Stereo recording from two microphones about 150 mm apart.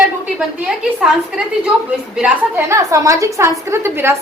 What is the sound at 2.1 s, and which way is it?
Speech, 5° right (ahead or behind).